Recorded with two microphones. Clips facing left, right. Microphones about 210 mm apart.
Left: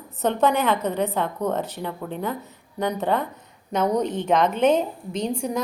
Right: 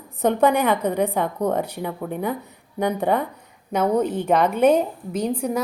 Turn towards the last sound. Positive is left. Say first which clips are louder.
# right 2 dB
turn(degrees=-5)  # may be behind; listen again after turning